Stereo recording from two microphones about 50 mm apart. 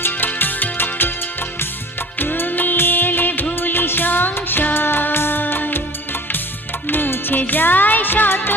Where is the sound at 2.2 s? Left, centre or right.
Left.